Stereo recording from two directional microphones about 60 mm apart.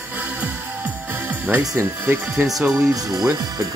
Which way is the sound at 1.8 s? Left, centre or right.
Right.